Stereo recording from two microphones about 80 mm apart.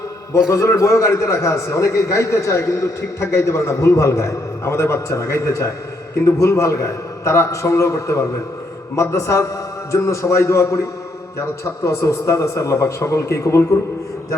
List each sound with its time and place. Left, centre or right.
0.3 s a man's voice: left